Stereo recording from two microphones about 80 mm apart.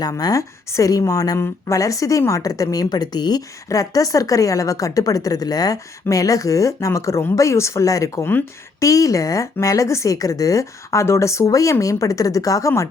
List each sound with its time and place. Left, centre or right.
0.0 s speech: left
2.9 s speech: left
3.7 s speech: left
8.2 s speech: left
8.8 s speech: left